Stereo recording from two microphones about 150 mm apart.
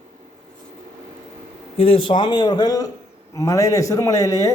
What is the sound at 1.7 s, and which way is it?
Speech, 40° left (ahead or behind).